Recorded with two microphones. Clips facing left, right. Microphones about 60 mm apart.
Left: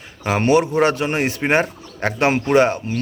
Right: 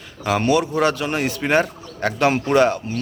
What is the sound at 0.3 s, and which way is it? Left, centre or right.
A man's voice, left.